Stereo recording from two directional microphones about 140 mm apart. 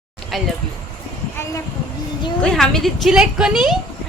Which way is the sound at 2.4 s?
5° left (ahead or behind).